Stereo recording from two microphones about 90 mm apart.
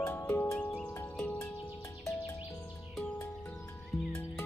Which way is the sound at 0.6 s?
10° left (ahead or behind).